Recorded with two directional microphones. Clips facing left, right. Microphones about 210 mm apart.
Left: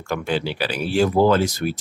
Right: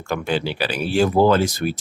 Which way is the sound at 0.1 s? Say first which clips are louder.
Right 1 dB; 25° right (ahead or behind).